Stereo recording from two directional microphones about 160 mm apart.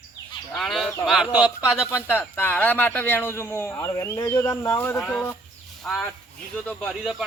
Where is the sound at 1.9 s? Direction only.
15° left (ahead or behind).